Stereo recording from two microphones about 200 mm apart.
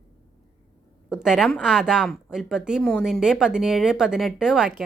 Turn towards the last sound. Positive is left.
turn(degrees=-5)  # may be behind; listen again after turning